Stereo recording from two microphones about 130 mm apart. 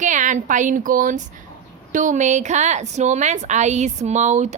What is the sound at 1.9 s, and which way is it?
A woman's voice, 70° right (ahead or behind).